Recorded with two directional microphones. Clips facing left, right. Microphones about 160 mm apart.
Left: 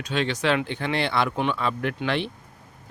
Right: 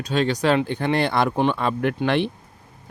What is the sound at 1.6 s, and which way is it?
Speech, 50° right (ahead or behind).